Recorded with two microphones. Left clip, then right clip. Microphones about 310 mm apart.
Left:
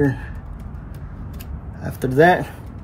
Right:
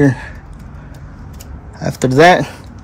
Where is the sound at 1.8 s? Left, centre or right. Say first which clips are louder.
Right 6 dB; right.